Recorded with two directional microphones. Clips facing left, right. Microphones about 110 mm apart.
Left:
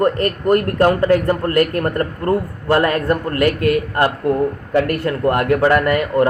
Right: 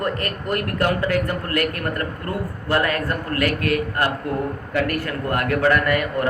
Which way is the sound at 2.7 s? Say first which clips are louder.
Left 6 dB; 25° left (ahead or behind).